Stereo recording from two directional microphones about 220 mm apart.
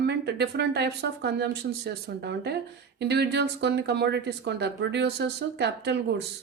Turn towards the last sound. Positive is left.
turn(degrees=-50)  # may be behind; listen again after turning